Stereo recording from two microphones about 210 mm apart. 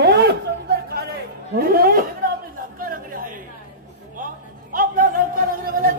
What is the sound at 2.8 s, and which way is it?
Chatter, 40° right (ahead or behind).